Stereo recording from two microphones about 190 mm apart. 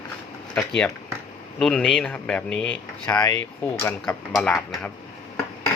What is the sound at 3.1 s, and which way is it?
Speech, 15° left (ahead or behind).